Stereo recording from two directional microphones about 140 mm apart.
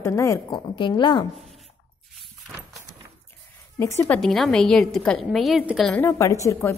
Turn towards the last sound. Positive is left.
turn(degrees=20)  # may be behind; listen again after turning